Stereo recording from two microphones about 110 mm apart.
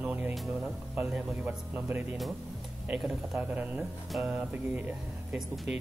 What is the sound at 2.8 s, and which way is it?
Speech, 5° right (ahead or behind).